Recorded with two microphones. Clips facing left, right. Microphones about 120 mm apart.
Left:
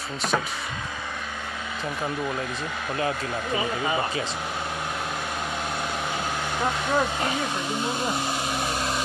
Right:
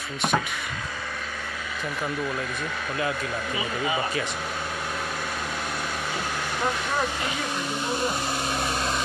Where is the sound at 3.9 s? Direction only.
25° left (ahead or behind).